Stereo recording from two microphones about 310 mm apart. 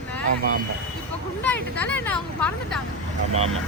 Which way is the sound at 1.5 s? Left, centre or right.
Centre.